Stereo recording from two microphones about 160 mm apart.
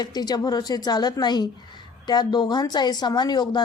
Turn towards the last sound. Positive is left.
turn(degrees=25)  # may be behind; listen again after turning